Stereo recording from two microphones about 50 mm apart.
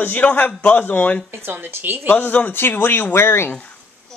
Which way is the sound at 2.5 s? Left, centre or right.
Left.